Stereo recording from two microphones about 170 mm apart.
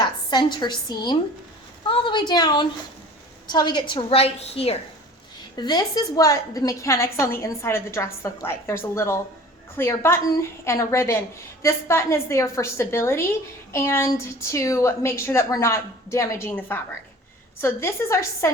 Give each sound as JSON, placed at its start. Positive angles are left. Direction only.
{"t": 0.3, "sound": "a woman's voice", "side_deg": 25}
{"t": 5.5, "sound": "a woman's voice", "side_deg": 25}